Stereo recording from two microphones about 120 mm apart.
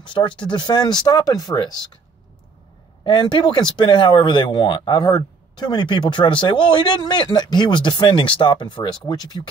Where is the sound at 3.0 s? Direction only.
40° left (ahead or behind).